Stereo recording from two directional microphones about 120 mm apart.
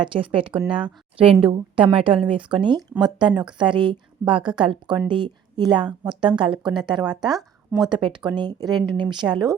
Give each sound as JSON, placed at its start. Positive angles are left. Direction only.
{"t": 0.0, "sound": "a woman's voice", "side_deg": -45}
{"t": 7.3, "sound": "speech", "side_deg": 0}
{"t": 7.9, "sound": "speech", "side_deg": -40}